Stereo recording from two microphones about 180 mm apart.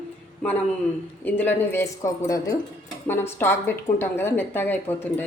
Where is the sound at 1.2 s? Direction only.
10° left (ahead or behind).